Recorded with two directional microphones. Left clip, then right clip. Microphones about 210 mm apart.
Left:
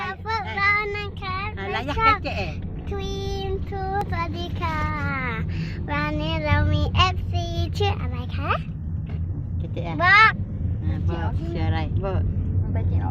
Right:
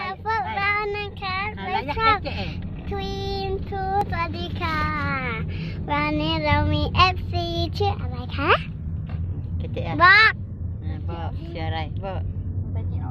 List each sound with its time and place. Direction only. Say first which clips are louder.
0.0 s child singing: right 2 dB; 10° right (ahead or behind)
0.5 s child singing: left 2 dB; centre (ahead or behind)
2.0 s vehicle: left 1 dB; 10° right (ahead or behind)
2.2 s a sound: left 2 dB; 45° left (ahead or behind)
2.9 s child singing: right 2 dB; 5° right (ahead or behind)
4.6 s child singing: right 2 dB; 10° right (ahead or behind)
5.3 s a sound: even; 5° left (ahead or behind)
5.9 s child singing: right 3 dB; 15° right (ahead or behind)
8.4 s speech: right 6 dB; 50° right (ahead or behind)
9.7 s vehicle: right 2 dB; 20° right (ahead or behind); by 12.2 s 35° right (ahead or behind)